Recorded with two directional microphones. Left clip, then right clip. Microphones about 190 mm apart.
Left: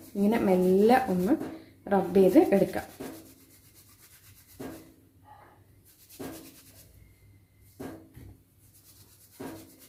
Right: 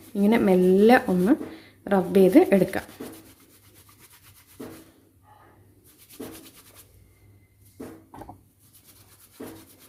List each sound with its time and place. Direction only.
0.2 s speech: 35° right (ahead or behind)